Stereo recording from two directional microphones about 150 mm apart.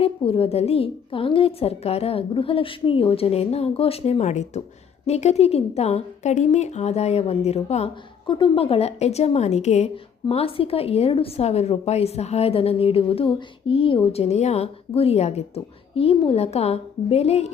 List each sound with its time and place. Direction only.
0.0 s a woman's voice: 40° left (ahead or behind)